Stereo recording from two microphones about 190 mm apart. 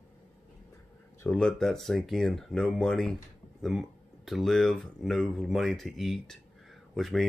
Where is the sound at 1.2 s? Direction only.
5° left (ahead or behind).